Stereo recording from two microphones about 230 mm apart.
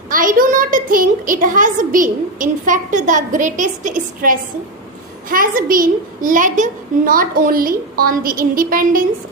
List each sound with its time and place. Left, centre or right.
0.1 s a woman's voice: right